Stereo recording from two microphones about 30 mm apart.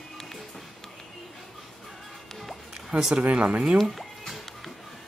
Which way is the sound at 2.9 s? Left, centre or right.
Right.